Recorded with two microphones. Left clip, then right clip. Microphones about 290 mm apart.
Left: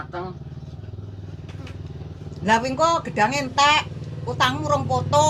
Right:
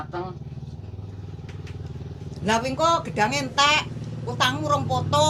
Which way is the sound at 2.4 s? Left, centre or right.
Left.